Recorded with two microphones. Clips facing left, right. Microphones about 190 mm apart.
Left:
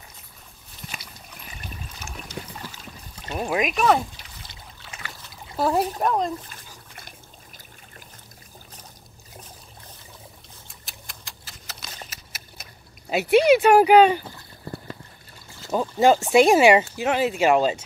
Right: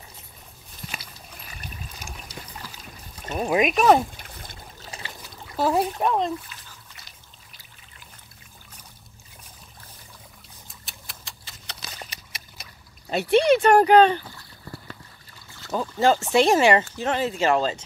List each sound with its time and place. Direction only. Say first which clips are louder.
2.0 s boat: left 2 dB; 35° right (ahead or behind)
3.6 s speech: right 3 dB; 30° right (ahead or behind)
4.2 s trickle: right 3 dB; 50° right (ahead or behind)
5.6 s speech: even; centre (ahead or behind)
6.5 s water: left 3 dB; 50° left (ahead or behind)
10.9 s a sound: left 1 dB; centre (ahead or behind)
13.1 s speech: left 2 dB; 5° left (ahead or behind)
14.6 s a sound: left 5 dB; 25° left (ahead or behind)
15.7 s speech: left 3 dB; 15° left (ahead or behind)